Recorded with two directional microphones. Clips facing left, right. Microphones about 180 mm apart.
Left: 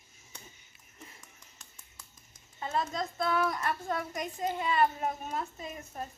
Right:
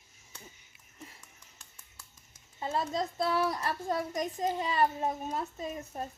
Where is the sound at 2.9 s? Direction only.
35° right (ahead or behind).